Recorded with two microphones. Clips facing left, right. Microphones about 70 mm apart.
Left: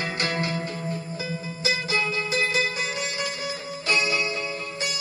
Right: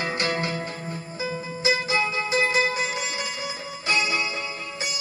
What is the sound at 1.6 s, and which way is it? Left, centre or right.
Music, right.